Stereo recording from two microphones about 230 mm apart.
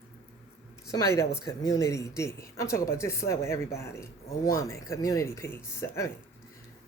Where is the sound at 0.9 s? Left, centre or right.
Centre.